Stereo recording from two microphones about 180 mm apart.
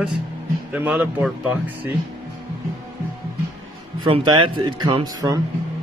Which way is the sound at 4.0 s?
25° right (ahead or behind).